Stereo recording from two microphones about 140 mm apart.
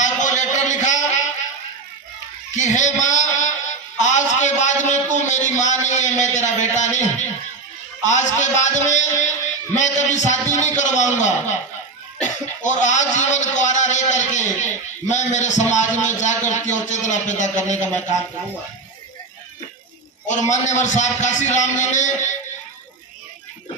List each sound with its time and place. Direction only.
0.0 s a sound: 60° left (ahead or behind)
2.5 s speech: 60° left (ahead or behind)
20.2 s speech: 60° left (ahead or behind)